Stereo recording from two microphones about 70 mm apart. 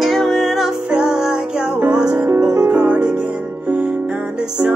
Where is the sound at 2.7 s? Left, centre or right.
Right.